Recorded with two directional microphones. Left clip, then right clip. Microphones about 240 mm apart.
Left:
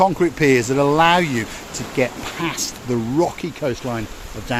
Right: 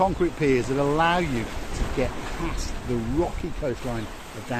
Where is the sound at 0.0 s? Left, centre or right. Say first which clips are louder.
Left 7 dB; left.